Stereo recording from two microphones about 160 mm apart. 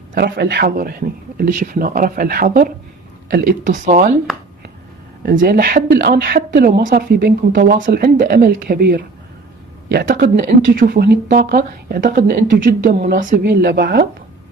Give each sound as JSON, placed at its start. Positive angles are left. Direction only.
{"t": 0.1, "sound": "speech", "side_deg": -80}
{"t": 3.3, "sound": "speech", "side_deg": -75}
{"t": 3.7, "sound": "speech", "side_deg": -55}
{"t": 5.2, "sound": "speech", "side_deg": -65}
{"t": 10.0, "sound": "speech", "side_deg": -70}